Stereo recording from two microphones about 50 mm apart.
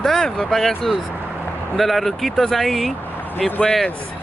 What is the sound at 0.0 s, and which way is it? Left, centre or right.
Speech, centre.